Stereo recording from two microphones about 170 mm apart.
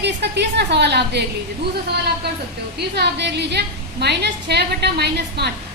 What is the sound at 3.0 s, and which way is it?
A woman's voice, 85° right.